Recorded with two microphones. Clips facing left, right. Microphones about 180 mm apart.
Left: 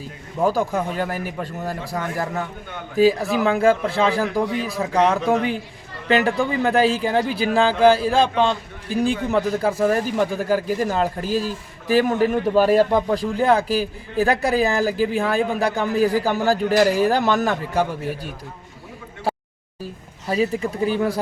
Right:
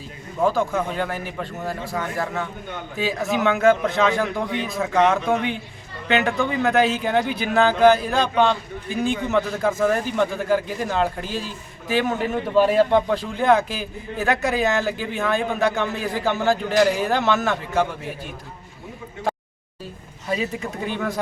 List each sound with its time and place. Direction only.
0.4 s a man's voice: 40° left (ahead or behind)
20.2 s a man's voice: 35° left (ahead or behind)